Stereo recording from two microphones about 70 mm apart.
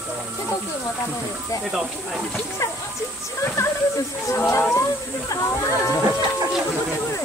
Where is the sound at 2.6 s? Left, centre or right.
Left.